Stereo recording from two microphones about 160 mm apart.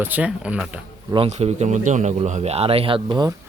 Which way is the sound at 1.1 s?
40° right (ahead or behind).